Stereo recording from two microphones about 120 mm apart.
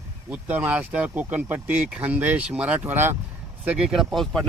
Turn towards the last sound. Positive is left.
turn(degrees=5)  # may be behind; listen again after turning